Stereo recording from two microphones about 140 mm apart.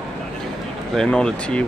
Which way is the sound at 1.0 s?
5° left (ahead or behind).